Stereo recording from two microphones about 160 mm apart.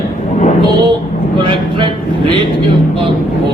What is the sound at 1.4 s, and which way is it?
Speech, 30° right (ahead or behind).